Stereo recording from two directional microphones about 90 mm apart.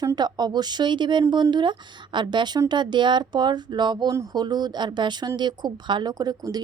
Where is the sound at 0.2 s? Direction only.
50° right (ahead or behind).